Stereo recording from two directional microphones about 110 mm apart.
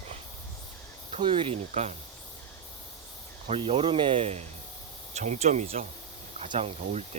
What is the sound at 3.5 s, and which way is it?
Speech, 60° right (ahead or behind).